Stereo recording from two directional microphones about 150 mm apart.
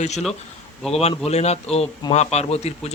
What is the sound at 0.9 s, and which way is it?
Speech, 45° left (ahead or behind).